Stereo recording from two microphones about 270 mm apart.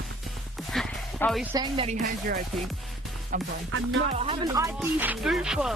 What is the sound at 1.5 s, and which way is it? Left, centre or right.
A woman's voice, centre.